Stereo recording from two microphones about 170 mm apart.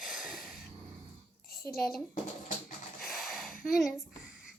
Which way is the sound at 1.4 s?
60° left (ahead or behind).